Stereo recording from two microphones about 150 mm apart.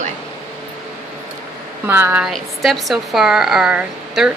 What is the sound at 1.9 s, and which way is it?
Speech, 15° right (ahead or behind).